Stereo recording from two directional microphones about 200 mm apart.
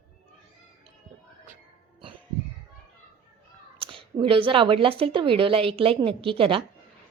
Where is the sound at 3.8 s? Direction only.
25° right (ahead or behind).